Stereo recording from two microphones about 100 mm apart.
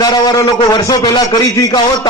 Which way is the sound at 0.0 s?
40° left (ahead or behind).